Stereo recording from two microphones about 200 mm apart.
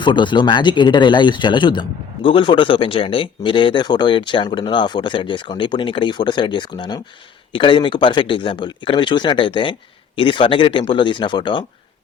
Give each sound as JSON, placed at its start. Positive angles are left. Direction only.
{"t": 0.0, "sound": "speech", "side_deg": 25}